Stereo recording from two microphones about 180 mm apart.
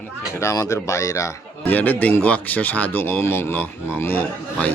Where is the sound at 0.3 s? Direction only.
15° left (ahead or behind).